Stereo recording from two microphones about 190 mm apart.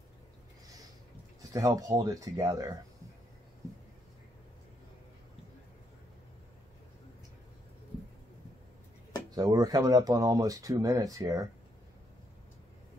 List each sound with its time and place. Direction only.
1.5 s speech: 20° right (ahead or behind)
9.3 s speech: 20° right (ahead or behind)